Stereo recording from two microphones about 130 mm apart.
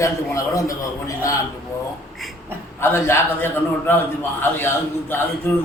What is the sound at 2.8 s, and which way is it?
A man's voice, 20° left (ahead or behind).